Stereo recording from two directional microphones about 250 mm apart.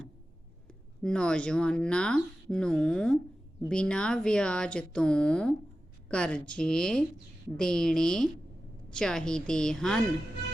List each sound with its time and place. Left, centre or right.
1.0 s speech: centre